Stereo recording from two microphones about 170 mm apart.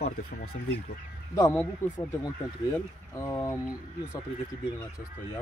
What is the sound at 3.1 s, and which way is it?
Speech, 20° left (ahead or behind).